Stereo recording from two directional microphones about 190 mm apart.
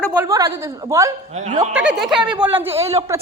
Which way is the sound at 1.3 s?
35° right (ahead or behind).